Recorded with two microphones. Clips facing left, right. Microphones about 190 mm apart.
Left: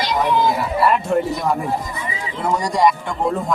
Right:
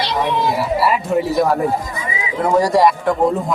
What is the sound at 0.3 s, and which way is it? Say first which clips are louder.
Speech: left 3 dB; 30° right (ahead or behind).